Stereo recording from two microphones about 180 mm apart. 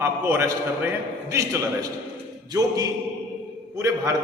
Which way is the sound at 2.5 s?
20° right (ahead or behind).